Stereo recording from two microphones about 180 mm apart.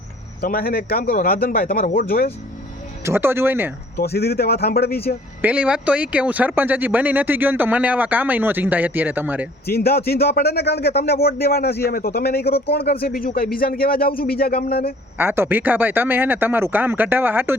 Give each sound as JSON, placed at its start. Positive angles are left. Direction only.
{"t": 0.4, "sound": "speech", "side_deg": 55}
{"t": 3.0, "sound": "speech", "side_deg": -15}
{"t": 3.9, "sound": "speech", "side_deg": 60}
{"t": 5.4, "sound": "speech", "side_deg": -5}
{"t": 9.6, "sound": "speech", "side_deg": 60}
{"t": 15.2, "sound": "speech", "side_deg": -10}